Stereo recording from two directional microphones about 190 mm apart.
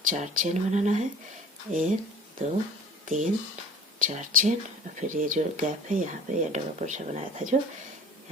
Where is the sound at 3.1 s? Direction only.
45° right (ahead or behind).